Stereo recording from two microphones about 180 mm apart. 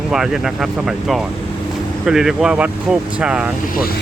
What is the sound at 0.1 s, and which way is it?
Speech, centre (ahead or behind).